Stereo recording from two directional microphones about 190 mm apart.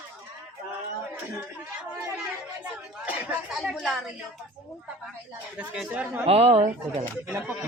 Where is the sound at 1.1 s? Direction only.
10° right (ahead or behind).